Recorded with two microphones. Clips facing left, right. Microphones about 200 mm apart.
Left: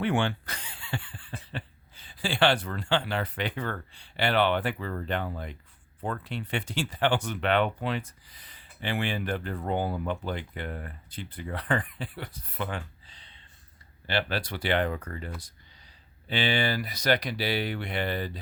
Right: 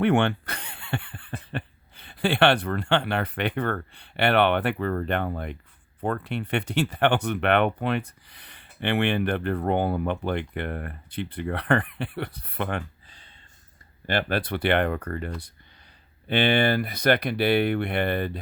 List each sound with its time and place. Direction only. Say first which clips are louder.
0.0 s speech: right 6 dB; 60° right (ahead or behind)